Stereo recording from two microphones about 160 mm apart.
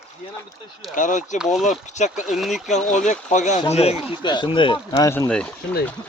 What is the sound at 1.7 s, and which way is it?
Speech, 50° left (ahead or behind).